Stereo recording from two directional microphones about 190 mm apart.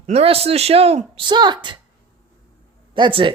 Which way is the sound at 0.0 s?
35° right (ahead or behind).